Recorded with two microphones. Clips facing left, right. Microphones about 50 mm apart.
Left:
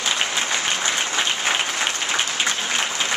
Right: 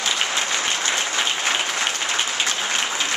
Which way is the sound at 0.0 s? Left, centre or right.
Centre.